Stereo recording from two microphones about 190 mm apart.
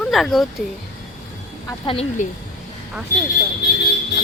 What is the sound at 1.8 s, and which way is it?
Speech, 30° left (ahead or behind).